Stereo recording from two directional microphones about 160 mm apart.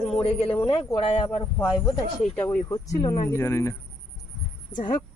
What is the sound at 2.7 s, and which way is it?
Speech, 25° left (ahead or behind).